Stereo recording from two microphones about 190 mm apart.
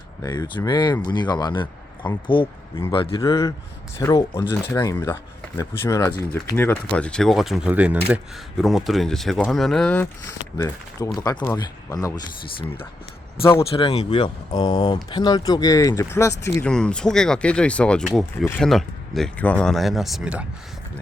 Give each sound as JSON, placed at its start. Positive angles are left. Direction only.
{"t": 0.2, "sound": "speech", "side_deg": 20}
{"t": 13.7, "sound": "speech", "side_deg": 30}